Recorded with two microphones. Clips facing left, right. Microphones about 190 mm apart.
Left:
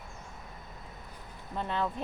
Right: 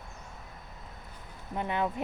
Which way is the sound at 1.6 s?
15° right (ahead or behind).